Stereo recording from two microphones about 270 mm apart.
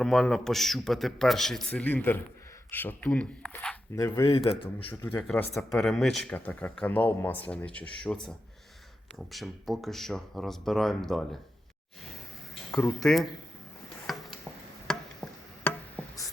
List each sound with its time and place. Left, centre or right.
0.0 s a man's voice: centre
4.9 s speech: centre
12.7 s speech: centre
14.1 s a sound: centre